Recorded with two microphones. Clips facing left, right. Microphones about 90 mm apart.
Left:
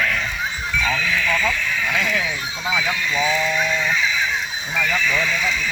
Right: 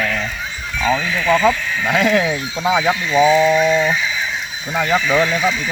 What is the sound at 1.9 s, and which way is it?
Speech, 80° right.